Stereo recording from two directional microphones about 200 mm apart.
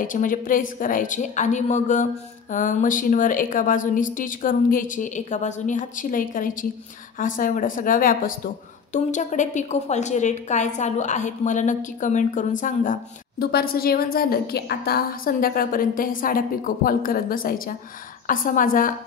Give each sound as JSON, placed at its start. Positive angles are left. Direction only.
{"t": 0.0, "sound": "a woman's voice", "side_deg": 40}